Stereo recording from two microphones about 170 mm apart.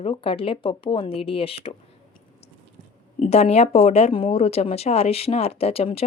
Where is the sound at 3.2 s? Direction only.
40° left (ahead or behind).